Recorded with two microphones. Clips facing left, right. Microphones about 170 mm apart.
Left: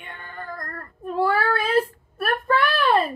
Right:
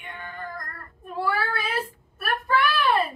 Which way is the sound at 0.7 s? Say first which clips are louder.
Left 11 dB; 50° left (ahead or behind).